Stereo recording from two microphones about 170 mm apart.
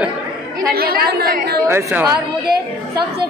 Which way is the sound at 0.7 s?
65° right (ahead or behind).